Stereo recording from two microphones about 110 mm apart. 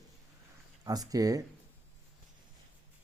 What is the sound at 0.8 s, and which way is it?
Speech, 35° right (ahead or behind).